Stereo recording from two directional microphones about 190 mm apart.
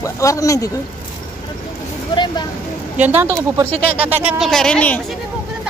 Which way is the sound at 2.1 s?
25° left (ahead or behind).